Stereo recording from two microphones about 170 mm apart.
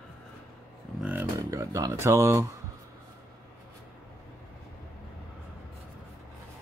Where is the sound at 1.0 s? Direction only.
10° right (ahead or behind).